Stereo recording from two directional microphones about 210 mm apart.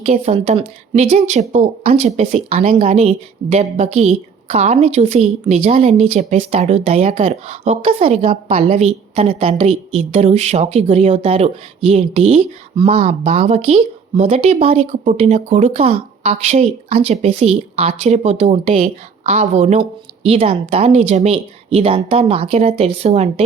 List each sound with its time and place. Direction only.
0.0 s a woman's voice: 30° right (ahead or behind)